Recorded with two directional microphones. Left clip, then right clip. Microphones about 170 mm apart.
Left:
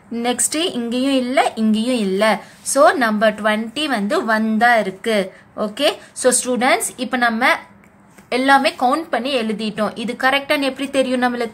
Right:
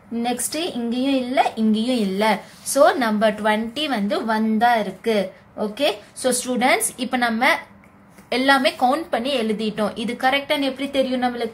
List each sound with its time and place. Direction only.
0.2 s a woman's voice: 30° left (ahead or behind)